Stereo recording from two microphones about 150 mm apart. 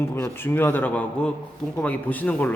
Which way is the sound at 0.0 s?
15° left (ahead or behind).